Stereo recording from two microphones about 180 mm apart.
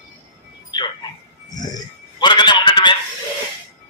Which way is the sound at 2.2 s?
25° left (ahead or behind).